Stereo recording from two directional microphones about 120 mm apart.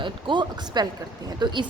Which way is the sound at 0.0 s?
40° right (ahead or behind).